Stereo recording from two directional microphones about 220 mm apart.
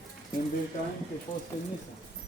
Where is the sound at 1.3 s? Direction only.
20° left (ahead or behind).